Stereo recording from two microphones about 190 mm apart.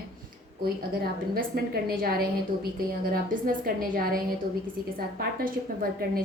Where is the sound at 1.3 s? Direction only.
50° right (ahead or behind).